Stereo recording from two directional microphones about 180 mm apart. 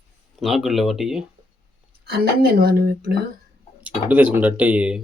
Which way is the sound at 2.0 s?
60° right (ahead or behind).